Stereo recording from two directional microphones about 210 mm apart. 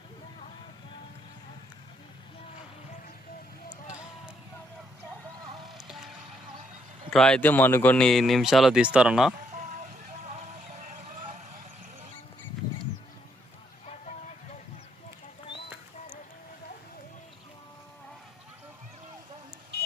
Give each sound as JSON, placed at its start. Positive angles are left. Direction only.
{"t": 5.6, "sound": "music", "side_deg": 0}
{"t": 7.1, "sound": "speech", "side_deg": 5}
{"t": 9.6, "sound": "vehicle", "side_deg": -35}
{"t": 10.2, "sound": "a sound", "side_deg": -35}
{"t": 13.8, "sound": "vehicle", "side_deg": 35}